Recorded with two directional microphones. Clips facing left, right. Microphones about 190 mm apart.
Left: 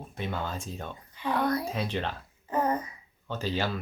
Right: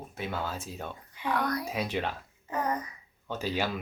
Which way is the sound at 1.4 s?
25° left (ahead or behind).